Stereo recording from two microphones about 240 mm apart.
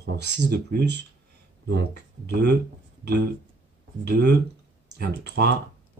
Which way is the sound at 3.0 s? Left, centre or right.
Right.